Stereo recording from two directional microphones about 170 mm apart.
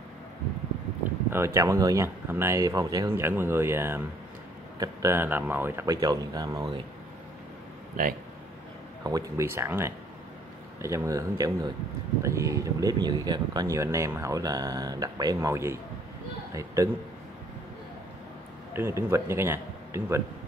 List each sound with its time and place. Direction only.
1.3 s speech: 15° right (ahead or behind)
8.0 s speech: 55° right (ahead or behind)
9.0 s speech: 20° right (ahead or behind)
18.7 s a man's voice: 15° right (ahead or behind)